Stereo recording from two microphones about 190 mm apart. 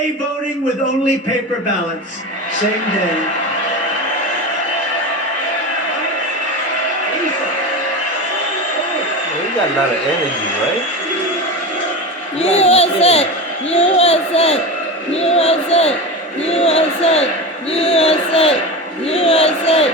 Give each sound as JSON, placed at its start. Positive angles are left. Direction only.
{"t": 12.4, "sound": "a child's voice", "side_deg": 35}